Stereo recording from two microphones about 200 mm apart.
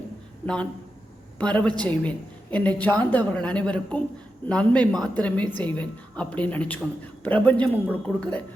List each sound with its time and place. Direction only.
0.4 s a woman's voice: 5° left (ahead or behind)